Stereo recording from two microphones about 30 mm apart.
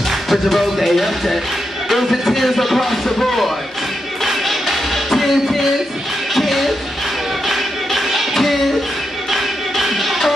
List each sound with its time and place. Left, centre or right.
0.3 s speech: centre
4.2 s music: centre
6.3 s speech: centre
7.4 s music: centre